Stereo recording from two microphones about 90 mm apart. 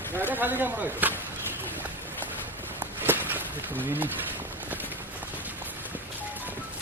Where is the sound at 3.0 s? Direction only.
20° right (ahead or behind).